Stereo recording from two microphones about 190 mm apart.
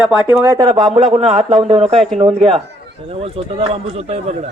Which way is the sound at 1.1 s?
30° right (ahead or behind).